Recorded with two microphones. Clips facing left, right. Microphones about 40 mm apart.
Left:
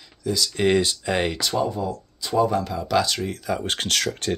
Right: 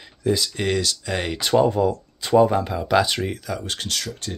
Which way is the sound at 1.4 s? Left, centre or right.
Right.